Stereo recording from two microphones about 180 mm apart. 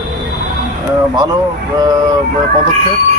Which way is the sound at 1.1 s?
20° right (ahead or behind).